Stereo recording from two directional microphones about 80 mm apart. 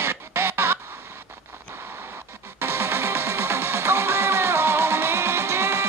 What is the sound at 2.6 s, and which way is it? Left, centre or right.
Music, right.